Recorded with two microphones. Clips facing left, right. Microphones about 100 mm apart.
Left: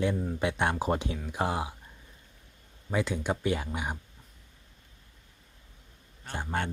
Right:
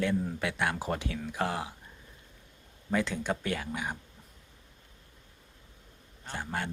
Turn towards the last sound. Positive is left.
turn(degrees=20)  # may be behind; listen again after turning